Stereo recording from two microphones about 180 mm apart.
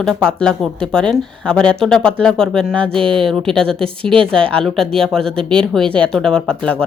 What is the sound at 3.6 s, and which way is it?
Speech, 30° right (ahead or behind).